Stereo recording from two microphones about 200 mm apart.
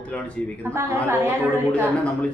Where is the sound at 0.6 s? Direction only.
10° right (ahead or behind).